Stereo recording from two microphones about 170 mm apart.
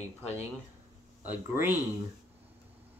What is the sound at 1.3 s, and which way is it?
Speech, 10° right (ahead or behind).